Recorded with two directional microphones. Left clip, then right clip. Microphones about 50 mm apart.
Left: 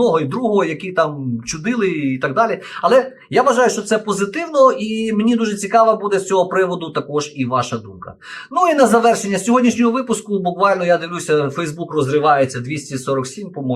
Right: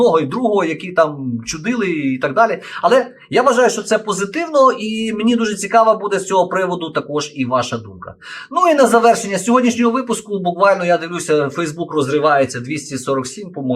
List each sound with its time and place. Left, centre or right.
0.0 s speech: right